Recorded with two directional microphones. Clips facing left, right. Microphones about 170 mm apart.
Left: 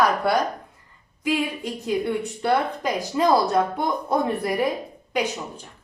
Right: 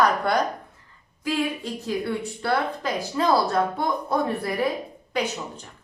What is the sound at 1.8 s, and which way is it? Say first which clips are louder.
A woman's voice: left 3 dB; 15° left (ahead or behind).